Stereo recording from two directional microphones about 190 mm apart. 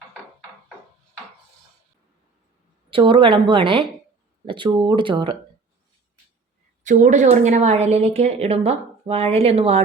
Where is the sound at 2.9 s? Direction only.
25° right (ahead or behind).